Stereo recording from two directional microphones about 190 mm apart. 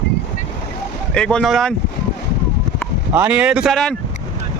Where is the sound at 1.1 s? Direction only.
5° left (ahead or behind).